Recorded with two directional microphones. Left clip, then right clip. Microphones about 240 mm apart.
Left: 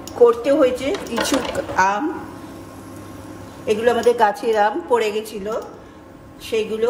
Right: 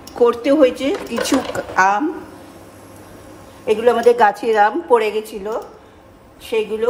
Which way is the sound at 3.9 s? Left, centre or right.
Right.